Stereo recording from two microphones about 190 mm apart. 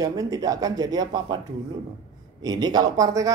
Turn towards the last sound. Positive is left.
turn(degrees=-20)  # may be behind; listen again after turning